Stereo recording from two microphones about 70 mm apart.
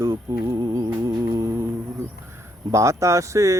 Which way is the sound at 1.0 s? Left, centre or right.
Right.